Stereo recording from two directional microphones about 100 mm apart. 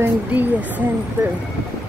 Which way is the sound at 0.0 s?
15° right (ahead or behind).